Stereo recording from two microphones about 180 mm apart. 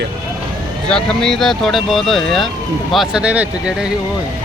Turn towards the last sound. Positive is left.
turn(degrees=-5)  # may be behind; listen again after turning